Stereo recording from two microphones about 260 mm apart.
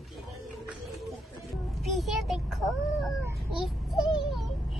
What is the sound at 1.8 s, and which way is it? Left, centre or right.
A child's voice, centre.